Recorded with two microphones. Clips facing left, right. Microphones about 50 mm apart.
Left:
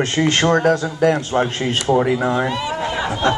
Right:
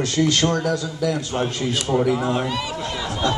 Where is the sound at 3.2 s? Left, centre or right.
Left.